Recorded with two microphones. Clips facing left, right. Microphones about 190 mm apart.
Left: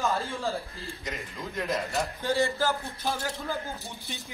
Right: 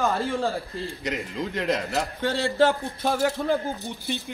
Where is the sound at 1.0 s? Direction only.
70° right (ahead or behind).